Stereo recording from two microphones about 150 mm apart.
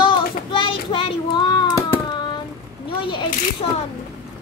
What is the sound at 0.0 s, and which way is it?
Child singing, 35° left (ahead or behind).